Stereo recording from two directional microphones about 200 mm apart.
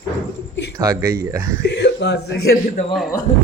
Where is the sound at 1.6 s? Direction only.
60° left (ahead or behind).